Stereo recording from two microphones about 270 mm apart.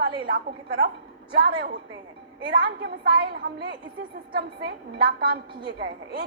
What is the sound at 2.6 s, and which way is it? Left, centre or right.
Speech, right.